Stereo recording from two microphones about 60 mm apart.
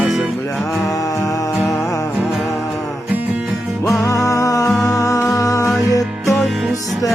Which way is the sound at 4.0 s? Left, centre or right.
Left.